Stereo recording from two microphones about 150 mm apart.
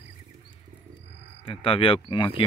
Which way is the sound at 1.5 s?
35° left (ahead or behind).